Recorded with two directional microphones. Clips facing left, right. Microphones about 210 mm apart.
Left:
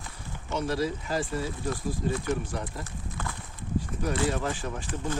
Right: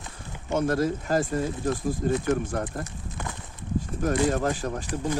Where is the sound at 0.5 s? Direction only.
50° right (ahead or behind).